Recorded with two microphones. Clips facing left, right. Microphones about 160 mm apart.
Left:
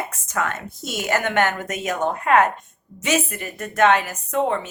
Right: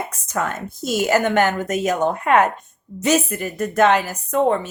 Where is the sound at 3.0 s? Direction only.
40° right (ahead or behind).